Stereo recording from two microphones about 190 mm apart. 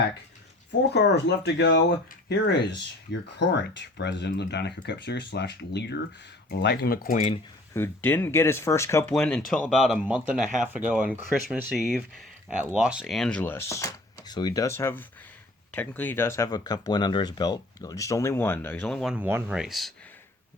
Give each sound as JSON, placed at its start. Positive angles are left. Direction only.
{"t": 0.9, "sound": "speech", "side_deg": 65}
{"t": 7.7, "sound": "speech", "side_deg": 10}
{"t": 9.1, "sound": "speech", "side_deg": 5}
{"t": 18.9, "sound": "speech", "side_deg": -5}